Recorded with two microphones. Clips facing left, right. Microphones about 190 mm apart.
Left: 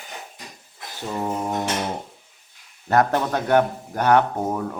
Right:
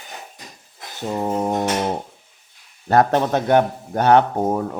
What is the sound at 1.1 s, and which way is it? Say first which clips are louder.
Speech: right 4 dB; 25° right (ahead or behind).